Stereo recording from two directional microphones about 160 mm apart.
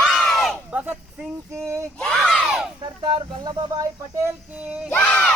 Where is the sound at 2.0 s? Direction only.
5° left (ahead or behind).